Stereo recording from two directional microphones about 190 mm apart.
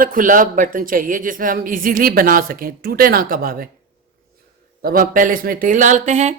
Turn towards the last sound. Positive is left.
turn(degrees=-35)  # may be behind; listen again after turning